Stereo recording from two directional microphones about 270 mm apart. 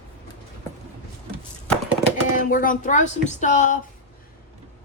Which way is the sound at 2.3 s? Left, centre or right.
Left.